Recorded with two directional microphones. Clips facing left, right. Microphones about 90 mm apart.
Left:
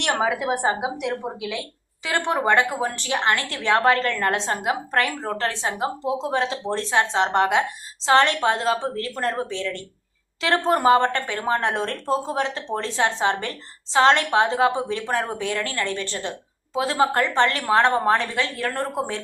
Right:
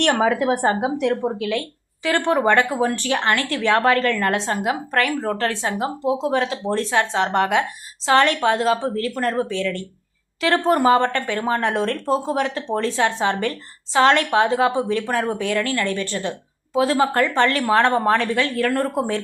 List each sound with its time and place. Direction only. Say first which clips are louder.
0.0 s a woman's voice: right 5 dB; 15° left (ahead or behind)